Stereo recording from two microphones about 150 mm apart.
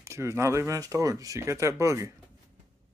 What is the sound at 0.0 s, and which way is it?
Speech, 20° right (ahead or behind).